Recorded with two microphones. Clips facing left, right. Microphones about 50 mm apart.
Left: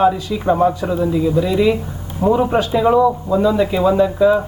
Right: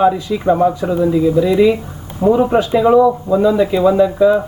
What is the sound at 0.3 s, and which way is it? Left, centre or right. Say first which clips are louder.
Speech: right 3 dB; right.